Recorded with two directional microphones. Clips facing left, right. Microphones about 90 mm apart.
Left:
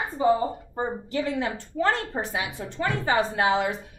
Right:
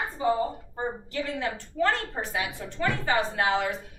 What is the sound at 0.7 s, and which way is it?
A woman's voice, 20° left (ahead or behind).